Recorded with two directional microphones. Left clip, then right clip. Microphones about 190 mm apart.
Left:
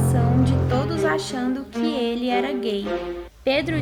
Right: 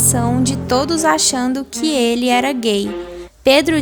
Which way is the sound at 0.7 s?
45° right (ahead or behind).